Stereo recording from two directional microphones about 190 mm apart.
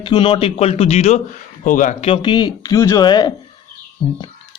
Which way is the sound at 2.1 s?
25° left (ahead or behind).